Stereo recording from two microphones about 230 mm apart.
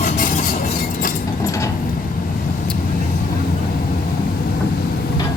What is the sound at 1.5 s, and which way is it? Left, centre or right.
Vehicle, centre.